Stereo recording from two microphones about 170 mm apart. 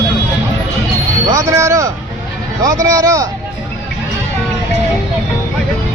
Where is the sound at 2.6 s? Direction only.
20° right (ahead or behind).